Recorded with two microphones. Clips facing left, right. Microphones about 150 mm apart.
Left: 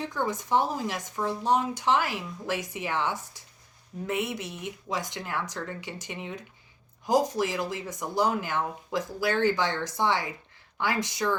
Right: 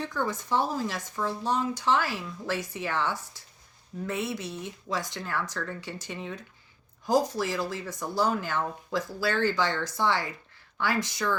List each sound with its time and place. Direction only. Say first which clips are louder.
0.0 s speech: left 1 dB; 15° left (ahead or behind)